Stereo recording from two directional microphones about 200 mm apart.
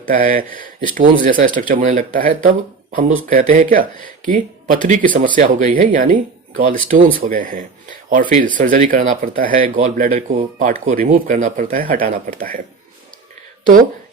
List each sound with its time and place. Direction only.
0.1 s speech: 45° right (ahead or behind)